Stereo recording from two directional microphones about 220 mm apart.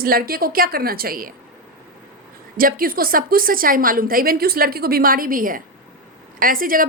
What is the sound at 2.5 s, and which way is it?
A woman's voice, 40° right (ahead or behind).